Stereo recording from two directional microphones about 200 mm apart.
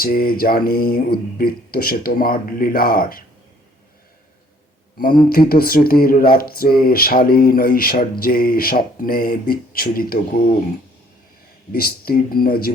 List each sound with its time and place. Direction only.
0.0 s speech: 45° left (ahead or behind)
5.3 s speech: 50° left (ahead or behind)
11.7 s speech: 50° left (ahead or behind)